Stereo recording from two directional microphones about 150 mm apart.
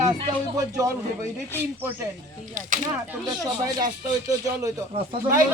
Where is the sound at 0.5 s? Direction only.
20° right (ahead or behind).